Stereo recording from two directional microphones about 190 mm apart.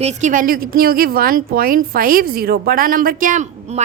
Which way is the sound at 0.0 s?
40° right (ahead or behind).